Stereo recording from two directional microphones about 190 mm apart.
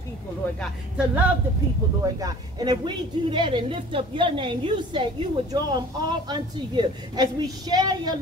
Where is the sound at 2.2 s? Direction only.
20° right (ahead or behind).